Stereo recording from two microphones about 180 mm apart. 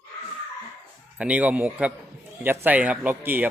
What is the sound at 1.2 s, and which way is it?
Speech, 10° right (ahead or behind).